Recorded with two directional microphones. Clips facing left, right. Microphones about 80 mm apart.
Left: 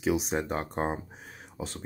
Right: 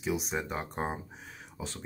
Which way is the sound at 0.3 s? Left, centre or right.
Left.